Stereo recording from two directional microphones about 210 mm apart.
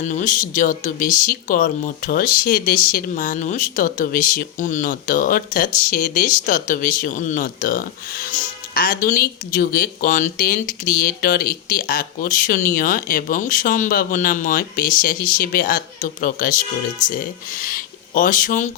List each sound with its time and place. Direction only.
0.0 s speech: 35° left (ahead or behind)